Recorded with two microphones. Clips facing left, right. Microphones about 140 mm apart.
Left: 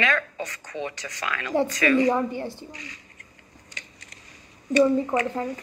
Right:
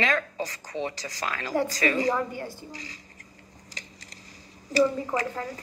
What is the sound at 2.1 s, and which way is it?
Speech, 20° left (ahead or behind).